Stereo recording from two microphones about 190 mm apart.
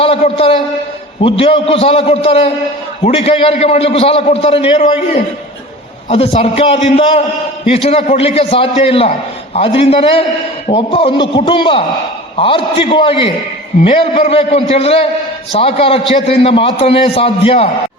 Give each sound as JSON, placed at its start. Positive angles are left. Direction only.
{"t": 0.2, "sound": "a man's voice", "side_deg": 30}
{"t": 6.1, "sound": "a man's voice", "side_deg": 30}